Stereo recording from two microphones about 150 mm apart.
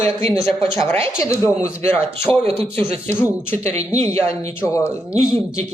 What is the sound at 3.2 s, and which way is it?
Speech, 15° left (ahead or behind).